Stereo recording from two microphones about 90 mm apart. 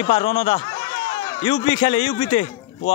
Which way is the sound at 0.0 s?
90° left.